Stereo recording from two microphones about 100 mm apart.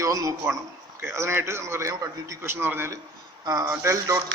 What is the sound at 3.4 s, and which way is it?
Speech, 40° right (ahead or behind).